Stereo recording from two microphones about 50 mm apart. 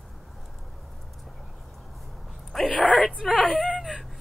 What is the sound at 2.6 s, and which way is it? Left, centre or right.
Speech, left.